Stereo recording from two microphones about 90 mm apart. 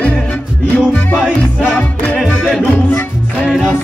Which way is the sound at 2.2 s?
Centre (ahead or behind).